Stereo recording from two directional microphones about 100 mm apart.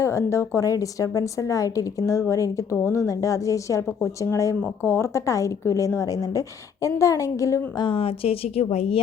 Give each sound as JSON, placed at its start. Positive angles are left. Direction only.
{"t": 0.0, "sound": "a woman's voice", "side_deg": 30}
{"t": 7.8, "sound": "speech", "side_deg": 65}